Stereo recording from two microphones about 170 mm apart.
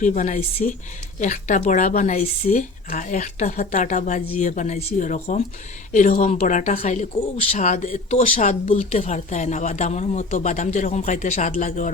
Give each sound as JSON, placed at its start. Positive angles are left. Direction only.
{"t": 0.0, "sound": "a woman's voice", "side_deg": 45}